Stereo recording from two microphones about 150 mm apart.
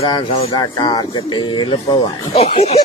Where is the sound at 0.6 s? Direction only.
30° left (ahead or behind).